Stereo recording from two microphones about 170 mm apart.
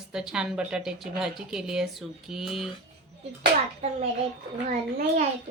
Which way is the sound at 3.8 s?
40° right (ahead or behind).